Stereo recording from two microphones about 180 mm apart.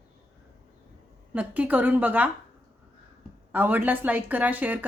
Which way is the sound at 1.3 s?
10° right (ahead or behind).